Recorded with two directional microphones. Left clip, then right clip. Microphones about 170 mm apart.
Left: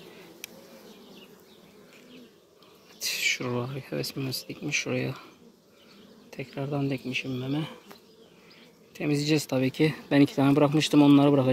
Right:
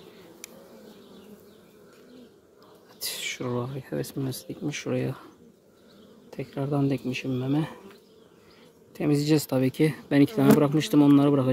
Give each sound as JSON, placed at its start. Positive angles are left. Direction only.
{"t": 3.0, "sound": "a sound", "side_deg": -30}
{"t": 3.4, "sound": "speech", "side_deg": -15}
{"t": 6.3, "sound": "speech", "side_deg": -35}
{"t": 8.9, "sound": "speech", "side_deg": -40}